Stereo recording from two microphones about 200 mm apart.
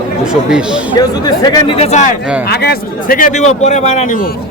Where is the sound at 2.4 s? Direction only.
50° left (ahead or behind).